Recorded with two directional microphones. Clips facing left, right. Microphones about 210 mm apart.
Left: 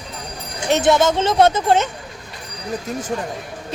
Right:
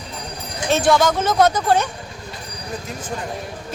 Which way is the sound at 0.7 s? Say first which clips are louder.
Left 1 dB; 20° left (ahead or behind).